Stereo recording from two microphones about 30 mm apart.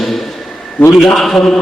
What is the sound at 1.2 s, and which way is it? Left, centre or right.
Speech, centre.